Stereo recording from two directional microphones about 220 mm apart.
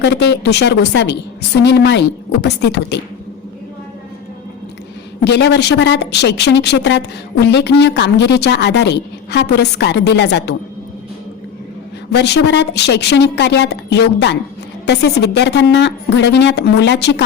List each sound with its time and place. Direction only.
0.0 s a woman's voice: 50° left (ahead or behind)
5.2 s a woman's voice: 50° left (ahead or behind)
12.1 s a woman's voice: 50° left (ahead or behind)